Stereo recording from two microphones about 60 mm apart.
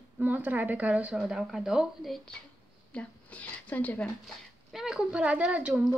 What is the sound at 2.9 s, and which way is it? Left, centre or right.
A woman's voice, left.